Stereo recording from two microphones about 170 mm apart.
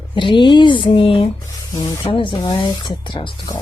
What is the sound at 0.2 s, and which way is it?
Speech, 30° left (ahead or behind).